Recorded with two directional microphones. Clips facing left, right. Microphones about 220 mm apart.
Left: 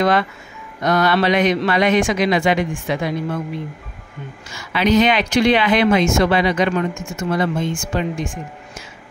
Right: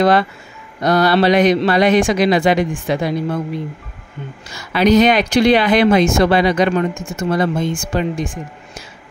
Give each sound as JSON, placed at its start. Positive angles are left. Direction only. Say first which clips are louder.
{"t": 0.0, "sound": "speech", "louder": "right 3 dB", "side_deg": -35}
{"t": 4.5, "sound": "speech", "louder": "right 4 dB", "side_deg": -40}